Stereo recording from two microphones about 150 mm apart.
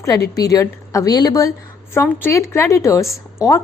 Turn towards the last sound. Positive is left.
turn(degrees=20)  # may be behind; listen again after turning